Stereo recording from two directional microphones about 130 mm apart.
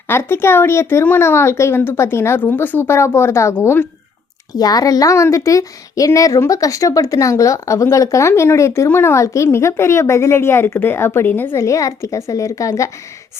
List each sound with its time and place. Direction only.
0.1 s a woman's voice: 20° left (ahead or behind)
4.5 s a woman's voice: 30° left (ahead or behind)